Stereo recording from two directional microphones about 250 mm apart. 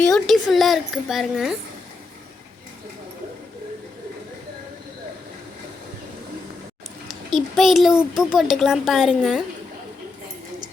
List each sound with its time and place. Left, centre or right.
0.0 s a child's voice: centre
7.1 s a child's voice: centre